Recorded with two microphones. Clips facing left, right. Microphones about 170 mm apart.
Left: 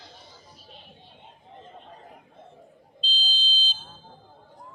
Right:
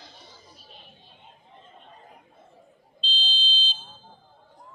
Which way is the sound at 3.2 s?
40° left (ahead or behind).